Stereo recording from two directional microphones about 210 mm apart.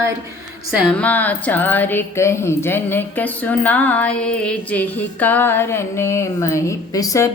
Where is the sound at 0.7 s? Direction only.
Centre (ahead or behind).